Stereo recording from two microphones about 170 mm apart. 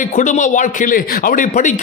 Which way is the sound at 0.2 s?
45° left (ahead or behind).